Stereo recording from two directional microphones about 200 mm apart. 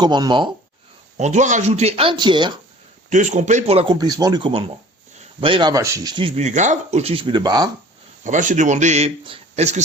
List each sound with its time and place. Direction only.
0.0 s speech: 20° right (ahead or behind)
1.1 s a man's voice: 35° right (ahead or behind)
3.1 s speech: 35° right (ahead or behind); by 7.7 s 20° right (ahead or behind)
8.2 s a man's voice: 40° right (ahead or behind)